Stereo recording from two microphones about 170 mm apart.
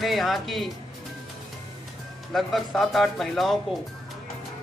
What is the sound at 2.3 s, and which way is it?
Speech, centre (ahead or behind).